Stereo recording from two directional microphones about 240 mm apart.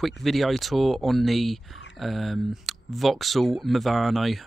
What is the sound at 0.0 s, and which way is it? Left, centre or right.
Speech, centre.